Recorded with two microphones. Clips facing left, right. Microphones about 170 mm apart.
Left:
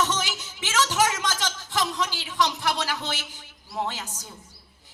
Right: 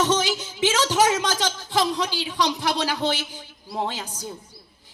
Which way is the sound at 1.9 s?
15° right (ahead or behind).